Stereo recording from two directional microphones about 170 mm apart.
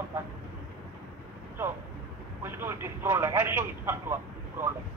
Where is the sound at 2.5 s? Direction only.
15° right (ahead or behind).